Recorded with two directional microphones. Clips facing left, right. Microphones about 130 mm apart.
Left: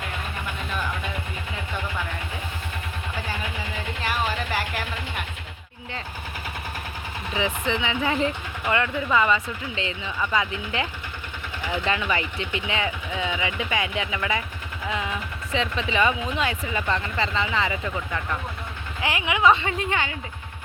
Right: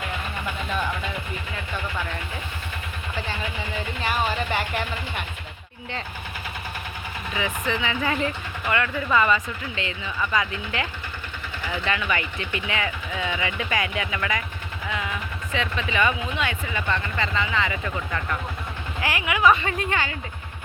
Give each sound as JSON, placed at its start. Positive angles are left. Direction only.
{"t": 4.0, "sound": "a sound", "side_deg": 0}
{"t": 7.3, "sound": "speech", "side_deg": 25}
{"t": 11.9, "sound": "speech", "side_deg": 25}
{"t": 14.8, "sound": "vehicle", "side_deg": 25}
{"t": 15.5, "sound": "speech", "side_deg": 30}
{"t": 17.8, "sound": "speech", "side_deg": 15}